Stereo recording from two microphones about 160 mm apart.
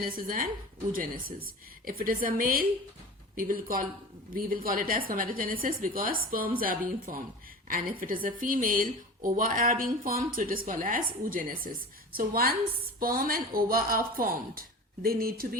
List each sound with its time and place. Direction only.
0.0 s a woman's voice: 60° right (ahead or behind)